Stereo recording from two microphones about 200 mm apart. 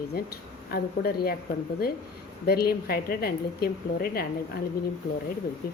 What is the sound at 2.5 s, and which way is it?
A woman's voice, 50° left (ahead or behind).